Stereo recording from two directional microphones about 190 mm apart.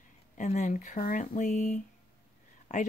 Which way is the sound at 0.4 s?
40° left (ahead or behind).